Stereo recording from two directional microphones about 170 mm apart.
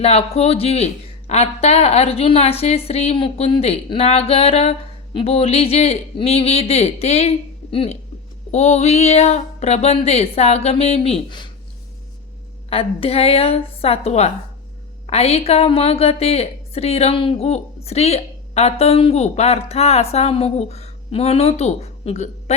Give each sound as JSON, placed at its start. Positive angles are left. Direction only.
{"t": 0.0, "sound": "a woman's voice", "side_deg": 35}
{"t": 12.7, "sound": "a woman's voice", "side_deg": 35}